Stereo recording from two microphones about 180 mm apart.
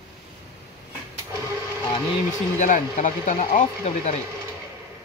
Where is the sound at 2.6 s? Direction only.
45° left (ahead or behind).